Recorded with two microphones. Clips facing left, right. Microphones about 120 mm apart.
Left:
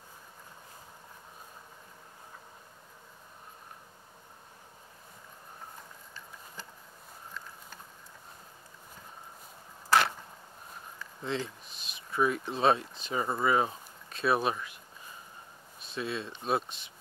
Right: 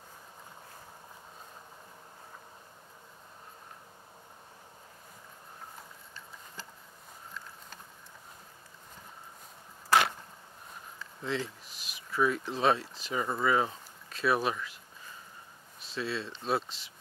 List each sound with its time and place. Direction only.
11.2 s speech: 20° left (ahead or behind)
15.9 s speech: 20° left (ahead or behind)